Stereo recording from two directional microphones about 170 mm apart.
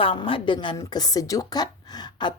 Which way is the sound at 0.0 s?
30° left (ahead or behind).